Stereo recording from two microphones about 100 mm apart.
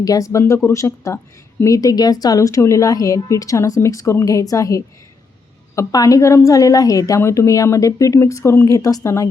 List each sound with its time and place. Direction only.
0.0 s speech: 35° left (ahead or behind)